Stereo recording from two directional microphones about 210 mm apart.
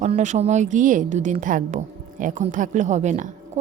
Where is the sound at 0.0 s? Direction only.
35° right (ahead or behind).